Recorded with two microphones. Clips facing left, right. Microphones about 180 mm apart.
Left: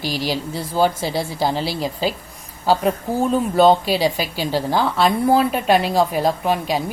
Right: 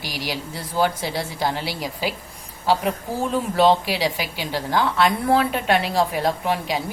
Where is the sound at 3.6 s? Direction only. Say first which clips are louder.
Left 3 dB; 25° left (ahead or behind).